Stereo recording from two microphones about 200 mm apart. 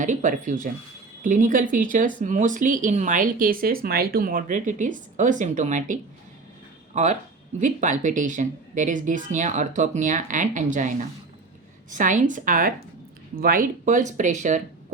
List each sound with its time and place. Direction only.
0.0 s speech: 40° right (ahead or behind)